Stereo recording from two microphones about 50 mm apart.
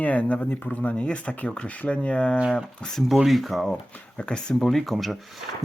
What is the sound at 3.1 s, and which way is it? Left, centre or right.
Speech, centre.